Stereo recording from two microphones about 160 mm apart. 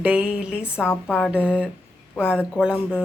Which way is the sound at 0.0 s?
10° right (ahead or behind).